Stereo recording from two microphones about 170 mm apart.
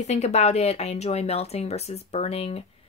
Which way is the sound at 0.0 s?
40° left (ahead or behind).